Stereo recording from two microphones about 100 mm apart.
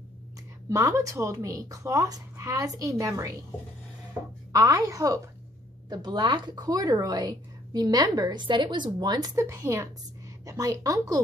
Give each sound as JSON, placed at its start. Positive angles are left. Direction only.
{"t": 0.7, "sound": "a woman's voice", "side_deg": -30}
{"t": 4.5, "sound": "a woman's voice", "side_deg": -35}
{"t": 5.9, "sound": "a woman's voice", "side_deg": -45}